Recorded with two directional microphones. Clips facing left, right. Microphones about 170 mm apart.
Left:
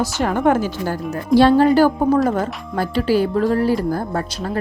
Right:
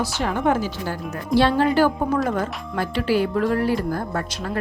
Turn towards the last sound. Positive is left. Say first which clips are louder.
# left 3 dB
turn(degrees=30)  # may be behind; listen again after turning